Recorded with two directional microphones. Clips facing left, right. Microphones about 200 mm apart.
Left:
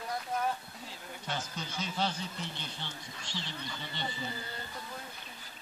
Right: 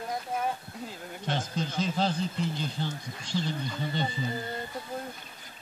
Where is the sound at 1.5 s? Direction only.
30° right (ahead or behind).